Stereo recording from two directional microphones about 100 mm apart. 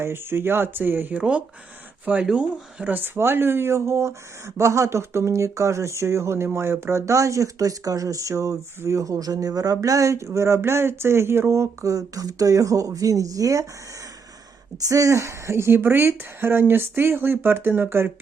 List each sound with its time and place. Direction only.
0.0 s speech: 25° right (ahead or behind)
14.8 s speech: 35° right (ahead or behind)